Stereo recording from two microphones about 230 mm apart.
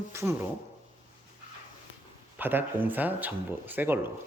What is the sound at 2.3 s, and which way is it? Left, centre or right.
Speech, centre.